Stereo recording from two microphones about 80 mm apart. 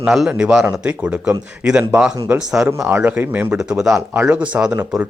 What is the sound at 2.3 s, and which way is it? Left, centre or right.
Speech, centre.